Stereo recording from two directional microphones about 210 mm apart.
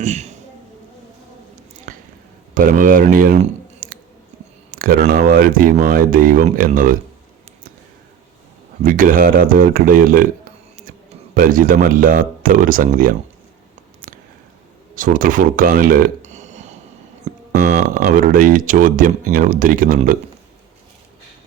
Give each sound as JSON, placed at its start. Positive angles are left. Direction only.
{"t": 0.0, "sound": "speech", "side_deg": -35}
{"t": 1.9, "sound": "a sound", "side_deg": -40}
{"t": 2.6, "sound": "speech", "side_deg": -40}
{"t": 8.8, "sound": "speech", "side_deg": -40}
{"t": 11.3, "sound": "speech", "side_deg": -40}
{"t": 14.1, "sound": "a sound", "side_deg": -40}
{"t": 14.9, "sound": "speech", "side_deg": -40}